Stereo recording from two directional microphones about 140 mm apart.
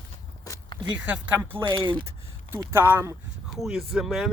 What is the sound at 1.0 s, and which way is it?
Speech, 10° right (ahead or behind).